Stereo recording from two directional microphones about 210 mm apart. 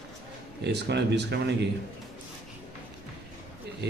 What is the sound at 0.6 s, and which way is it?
Mantra, 55° right (ahead or behind).